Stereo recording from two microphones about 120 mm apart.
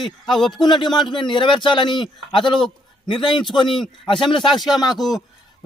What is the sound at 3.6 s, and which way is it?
Speech, 45° left (ahead or behind).